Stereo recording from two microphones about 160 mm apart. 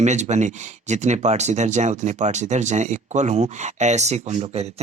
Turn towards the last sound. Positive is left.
turn(degrees=-45)  # may be behind; listen again after turning